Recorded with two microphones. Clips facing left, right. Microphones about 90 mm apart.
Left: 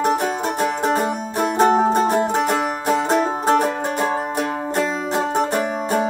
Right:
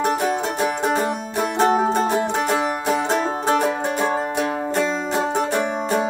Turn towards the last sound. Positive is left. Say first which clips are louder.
# even
turn(degrees=0)  # may be behind; listen again after turning